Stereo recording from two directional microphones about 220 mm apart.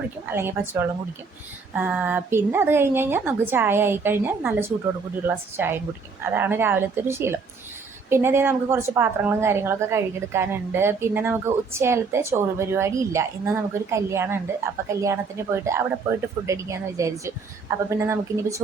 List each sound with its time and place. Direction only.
0.3 s a woman's voice: 10° right (ahead or behind)